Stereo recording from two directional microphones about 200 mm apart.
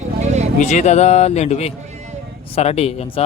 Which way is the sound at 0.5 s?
35° left (ahead or behind).